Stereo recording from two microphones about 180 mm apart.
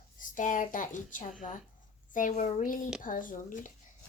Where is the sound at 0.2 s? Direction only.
45° left (ahead or behind).